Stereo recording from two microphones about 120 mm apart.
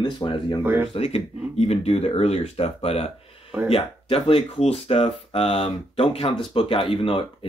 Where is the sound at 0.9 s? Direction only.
55° left (ahead or behind).